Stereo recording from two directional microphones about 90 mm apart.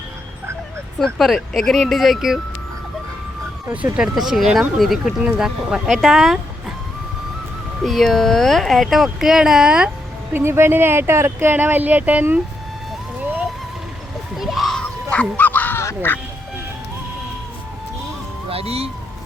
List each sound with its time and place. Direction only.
0.9 s speech: 5° left (ahead or behind)
3.9 s speech: 5° right (ahead or behind)
7.9 s speech: centre (ahead or behind)
10.3 s speech: 30° right (ahead or behind)
14.3 s a sound: centre (ahead or behind); by 15.8 s 20° left (ahead or behind)
16.0 s goose: 25° left (ahead or behind)
18.5 s speech: 90° right